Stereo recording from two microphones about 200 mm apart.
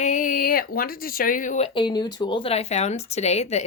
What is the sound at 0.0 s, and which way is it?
Speech, 40° left (ahead or behind).